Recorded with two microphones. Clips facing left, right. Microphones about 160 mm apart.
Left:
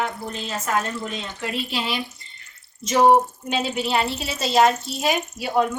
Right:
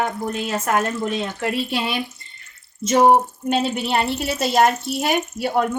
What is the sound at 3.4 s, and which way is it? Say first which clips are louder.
Speech: right 3 dB; 50° right (ahead or behind).